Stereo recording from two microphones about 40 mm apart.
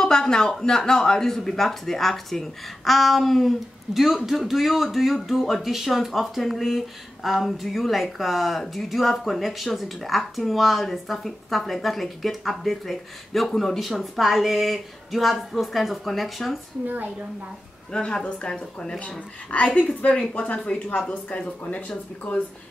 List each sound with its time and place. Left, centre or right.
0.0 s speech: centre
16.8 s a woman's voice: right
17.9 s a woman's voice: left
18.9 s speech: left